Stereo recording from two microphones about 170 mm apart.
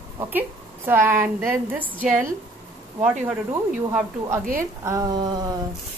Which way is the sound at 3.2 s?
10° right (ahead or behind).